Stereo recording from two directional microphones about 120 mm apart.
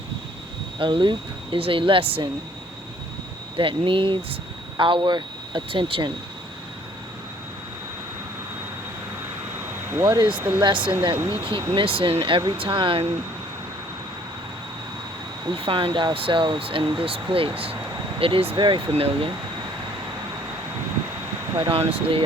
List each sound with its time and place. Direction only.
0.8 s speech: 40° right (ahead or behind)
3.6 s speech: 45° right (ahead or behind)
9.9 s speech: 35° right (ahead or behind)
15.5 s speech: 50° right (ahead or behind)
21.7 s speech: 50° right (ahead or behind)